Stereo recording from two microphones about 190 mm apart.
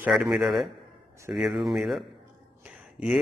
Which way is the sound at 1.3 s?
Centre (ahead or behind).